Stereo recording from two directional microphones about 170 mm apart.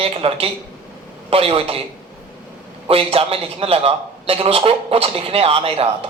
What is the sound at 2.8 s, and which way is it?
A man's voice, 35° right (ahead or behind).